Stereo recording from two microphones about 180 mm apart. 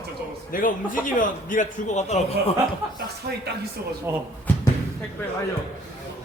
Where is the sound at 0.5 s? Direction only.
50° left (ahead or behind).